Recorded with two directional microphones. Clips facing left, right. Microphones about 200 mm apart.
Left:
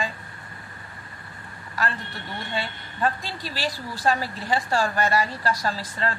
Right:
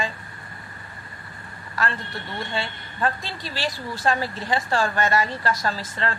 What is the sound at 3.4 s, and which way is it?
Speech, 40° left (ahead or behind).